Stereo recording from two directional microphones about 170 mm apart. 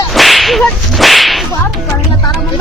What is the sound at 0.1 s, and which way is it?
Whip, centre (ahead or behind).